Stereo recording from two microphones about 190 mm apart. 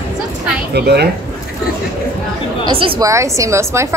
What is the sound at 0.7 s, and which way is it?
Speech, 60° right (ahead or behind).